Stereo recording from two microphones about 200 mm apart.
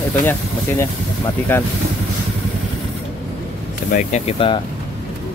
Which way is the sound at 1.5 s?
10° left (ahead or behind).